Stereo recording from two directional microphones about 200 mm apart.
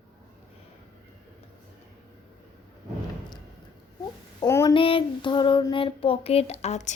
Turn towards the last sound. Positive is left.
turn(degrees=35)  # may be behind; listen again after turning